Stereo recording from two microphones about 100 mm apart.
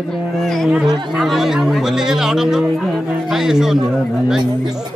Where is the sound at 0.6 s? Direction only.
5° right (ahead or behind).